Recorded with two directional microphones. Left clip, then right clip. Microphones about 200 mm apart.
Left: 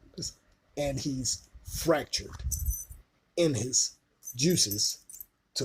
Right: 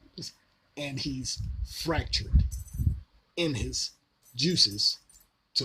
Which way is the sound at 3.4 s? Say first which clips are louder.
Left 4 dB; 15° right (ahead or behind).